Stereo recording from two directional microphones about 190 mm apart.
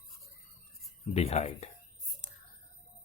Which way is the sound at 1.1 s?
35° left (ahead or behind).